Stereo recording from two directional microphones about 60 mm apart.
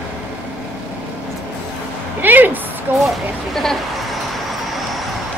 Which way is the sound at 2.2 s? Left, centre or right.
Right.